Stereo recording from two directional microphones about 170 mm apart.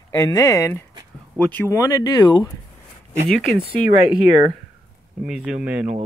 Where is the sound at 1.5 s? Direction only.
15° left (ahead or behind).